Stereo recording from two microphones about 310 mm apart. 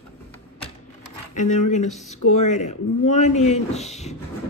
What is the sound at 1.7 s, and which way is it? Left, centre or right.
Speech, left.